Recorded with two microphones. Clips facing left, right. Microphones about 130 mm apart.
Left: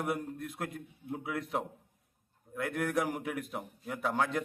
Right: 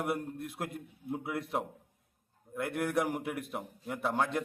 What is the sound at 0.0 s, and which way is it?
A man's voice, 5° right (ahead or behind).